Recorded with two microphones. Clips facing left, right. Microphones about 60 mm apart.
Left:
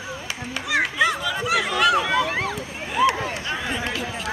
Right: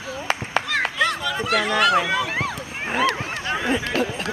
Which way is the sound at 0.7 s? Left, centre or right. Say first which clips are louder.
Left 4 dB; centre.